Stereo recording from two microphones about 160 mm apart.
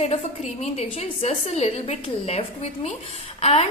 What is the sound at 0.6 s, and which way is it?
A woman's voice, 45° left (ahead or behind).